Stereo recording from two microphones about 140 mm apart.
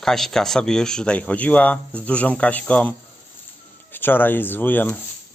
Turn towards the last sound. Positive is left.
turn(degrees=15)  # may be behind; listen again after turning